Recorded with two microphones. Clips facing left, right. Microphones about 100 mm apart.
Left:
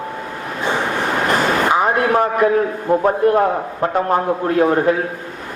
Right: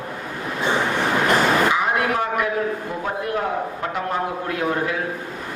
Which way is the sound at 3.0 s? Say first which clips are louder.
Left 9 dB; 40° left (ahead or behind).